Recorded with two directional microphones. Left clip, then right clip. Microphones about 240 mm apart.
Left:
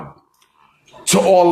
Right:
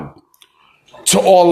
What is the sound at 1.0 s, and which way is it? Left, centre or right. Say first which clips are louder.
Speech: right 2 dB; right.